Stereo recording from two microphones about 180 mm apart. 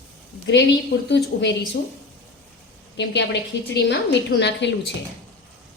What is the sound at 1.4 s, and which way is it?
Speech, 75° left (ahead or behind).